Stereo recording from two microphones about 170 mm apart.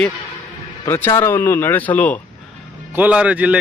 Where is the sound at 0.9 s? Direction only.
15° left (ahead or behind).